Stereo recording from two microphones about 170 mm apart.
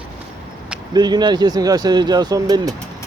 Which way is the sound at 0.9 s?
25° right (ahead or behind).